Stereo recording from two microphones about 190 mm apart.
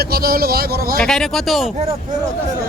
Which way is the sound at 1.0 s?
5° left (ahead or behind).